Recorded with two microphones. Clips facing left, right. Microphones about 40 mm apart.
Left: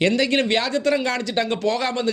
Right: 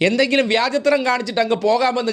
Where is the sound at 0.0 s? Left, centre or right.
Left.